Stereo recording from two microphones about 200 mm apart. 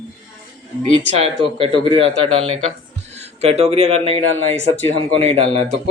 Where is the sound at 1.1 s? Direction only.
30° right (ahead or behind).